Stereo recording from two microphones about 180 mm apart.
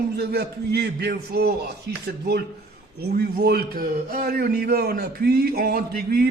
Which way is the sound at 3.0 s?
60° right (ahead or behind).